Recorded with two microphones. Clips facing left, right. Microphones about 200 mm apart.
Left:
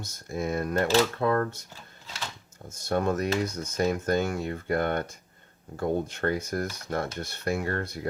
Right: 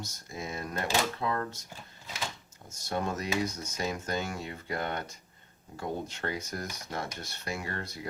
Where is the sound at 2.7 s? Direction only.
55° left (ahead or behind).